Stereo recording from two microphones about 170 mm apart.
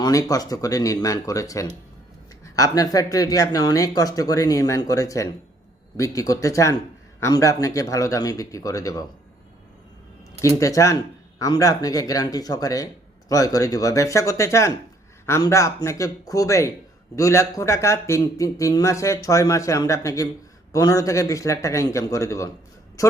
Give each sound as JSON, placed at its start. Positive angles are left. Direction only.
{"t": 0.0, "sound": "speech", "side_deg": 20}
{"t": 10.6, "sound": "speech", "side_deg": 20}